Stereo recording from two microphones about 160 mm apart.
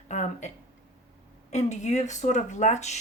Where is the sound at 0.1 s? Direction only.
50° left (ahead or behind).